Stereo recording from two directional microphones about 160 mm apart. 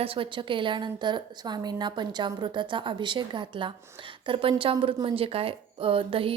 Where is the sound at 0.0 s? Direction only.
35° right (ahead or behind).